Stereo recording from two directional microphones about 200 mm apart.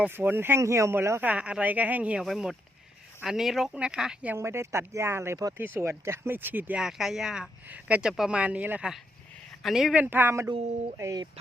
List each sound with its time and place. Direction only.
0.0 s speech: 10° right (ahead or behind)